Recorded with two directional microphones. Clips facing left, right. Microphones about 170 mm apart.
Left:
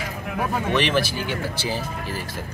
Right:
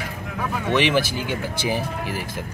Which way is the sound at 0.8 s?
15° right (ahead or behind).